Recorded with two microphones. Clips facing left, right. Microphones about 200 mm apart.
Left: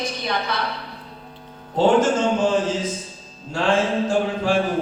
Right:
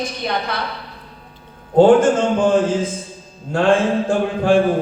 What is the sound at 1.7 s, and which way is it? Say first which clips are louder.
A man's voice: right 6 dB; 55° right (ahead or behind).